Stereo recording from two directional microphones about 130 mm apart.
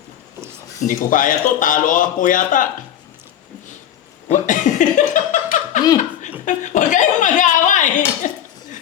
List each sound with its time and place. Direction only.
0.8 s speech: 90° left
4.3 s chuckle: 75° left (ahead or behind)